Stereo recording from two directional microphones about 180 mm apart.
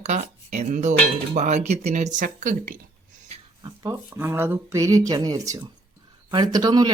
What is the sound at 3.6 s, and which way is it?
Speech, 15° right (ahead or behind).